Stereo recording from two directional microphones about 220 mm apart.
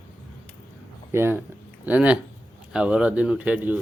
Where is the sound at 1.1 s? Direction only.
10° right (ahead or behind).